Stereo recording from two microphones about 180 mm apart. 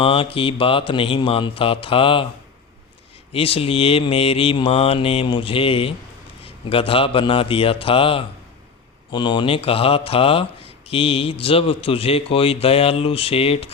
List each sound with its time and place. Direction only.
0.0 s mantra: 30° left (ahead or behind)
3.3 s speech: 30° left (ahead or behind)